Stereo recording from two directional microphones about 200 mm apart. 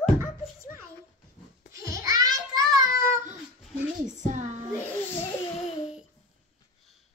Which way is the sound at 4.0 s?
35° right (ahead or behind).